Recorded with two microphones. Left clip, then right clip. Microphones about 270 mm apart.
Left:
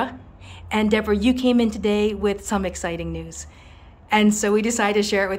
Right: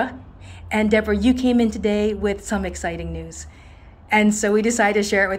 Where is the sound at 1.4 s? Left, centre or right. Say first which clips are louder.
Even; left.